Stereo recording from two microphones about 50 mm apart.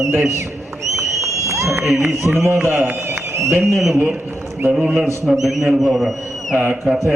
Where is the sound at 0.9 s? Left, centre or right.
Right.